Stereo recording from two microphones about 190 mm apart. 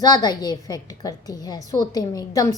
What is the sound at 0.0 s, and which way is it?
A woman's voice, 20° left (ahead or behind).